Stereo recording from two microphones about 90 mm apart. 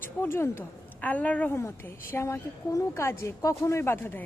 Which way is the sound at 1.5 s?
30° left (ahead or behind).